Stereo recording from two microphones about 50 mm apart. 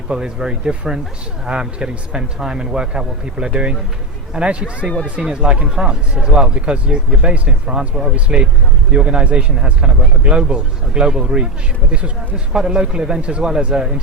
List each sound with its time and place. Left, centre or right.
0.1 s a man's voice: centre
12.5 s a man's voice: centre